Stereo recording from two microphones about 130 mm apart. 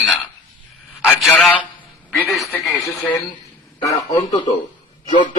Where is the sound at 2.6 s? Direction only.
Centre (ahead or behind).